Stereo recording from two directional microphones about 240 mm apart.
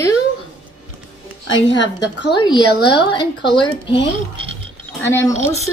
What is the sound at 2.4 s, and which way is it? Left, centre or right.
A woman's voice, centre.